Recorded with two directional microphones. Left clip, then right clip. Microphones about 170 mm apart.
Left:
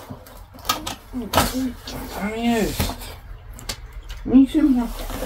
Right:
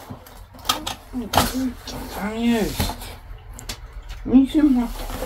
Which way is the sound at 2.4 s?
5° left (ahead or behind).